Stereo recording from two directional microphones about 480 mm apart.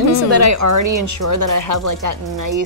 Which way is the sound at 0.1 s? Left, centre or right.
Right.